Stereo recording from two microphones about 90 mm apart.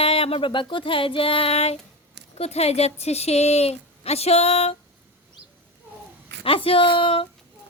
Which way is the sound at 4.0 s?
90° left.